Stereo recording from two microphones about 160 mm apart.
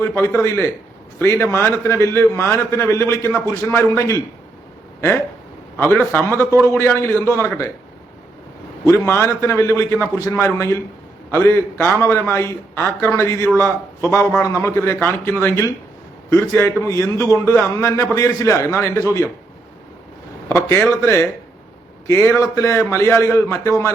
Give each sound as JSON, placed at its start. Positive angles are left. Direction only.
{"t": 0.0, "sound": "a man's voice", "side_deg": 15}
{"t": 5.7, "sound": "a man's voice", "side_deg": 10}
{"t": 8.8, "sound": "a man's voice", "side_deg": 15}
{"t": 20.5, "sound": "a man's voice", "side_deg": 15}
{"t": 22.0, "sound": "a man's voice", "side_deg": 20}